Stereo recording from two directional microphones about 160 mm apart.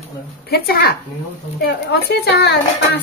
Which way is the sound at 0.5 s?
75° left (ahead or behind).